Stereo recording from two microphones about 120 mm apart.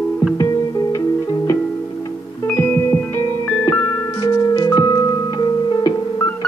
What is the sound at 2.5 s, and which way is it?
Music, 20° left (ahead or behind).